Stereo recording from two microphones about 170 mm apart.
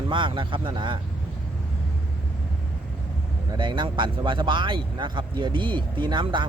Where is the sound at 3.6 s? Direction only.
25° right (ahead or behind).